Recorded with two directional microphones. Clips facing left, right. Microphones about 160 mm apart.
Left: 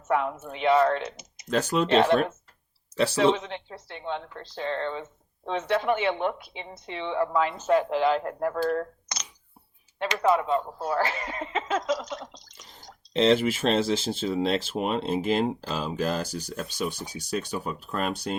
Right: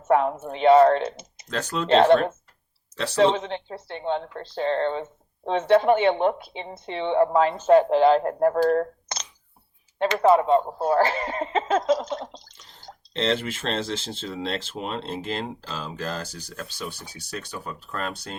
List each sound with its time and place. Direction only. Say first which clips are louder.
0.0 s a woman's voice: right 5 dB; 35° right (ahead or behind)
1.5 s speech: left 4 dB; 10° left (ahead or behind)
1.9 s a woman's voice: right 6 dB; 30° right (ahead or behind)
3.3 s a woman's voice: right 5 dB; 35° right (ahead or behind)
10.2 s a woman's voice: right 5 dB; 35° right (ahead or behind)
13.1 s speech: left 4 dB; 10° left (ahead or behind)